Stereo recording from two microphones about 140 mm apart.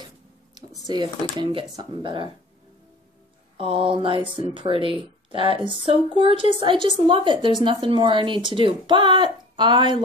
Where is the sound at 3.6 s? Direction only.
40° right (ahead or behind).